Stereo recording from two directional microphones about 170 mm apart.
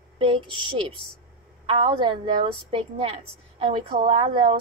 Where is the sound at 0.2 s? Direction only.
30° right (ahead or behind).